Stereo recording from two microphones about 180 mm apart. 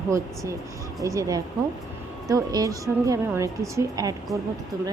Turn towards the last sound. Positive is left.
turn(degrees=-20)  # may be behind; listen again after turning